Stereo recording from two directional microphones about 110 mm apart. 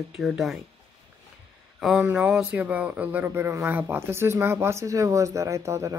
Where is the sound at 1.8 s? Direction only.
Centre (ahead or behind).